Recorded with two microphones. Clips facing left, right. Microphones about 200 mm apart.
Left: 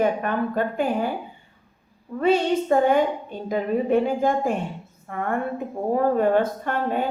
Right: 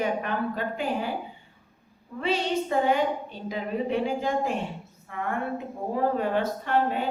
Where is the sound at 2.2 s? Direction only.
50° left (ahead or behind).